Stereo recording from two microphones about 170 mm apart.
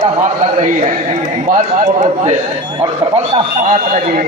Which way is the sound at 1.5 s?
50° right (ahead or behind).